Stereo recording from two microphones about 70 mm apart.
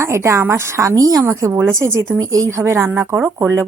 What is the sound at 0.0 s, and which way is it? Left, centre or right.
A woman's voice, right.